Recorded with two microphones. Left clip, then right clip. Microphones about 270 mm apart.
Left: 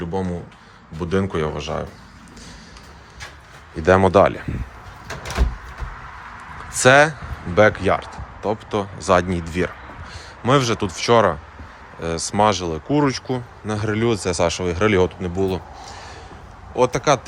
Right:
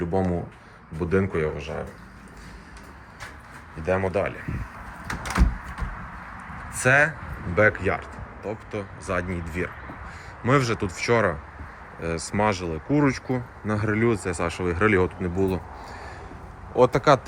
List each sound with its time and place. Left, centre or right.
0.1 s speech: centre
3.8 s speech: left
6.7 s speech: centre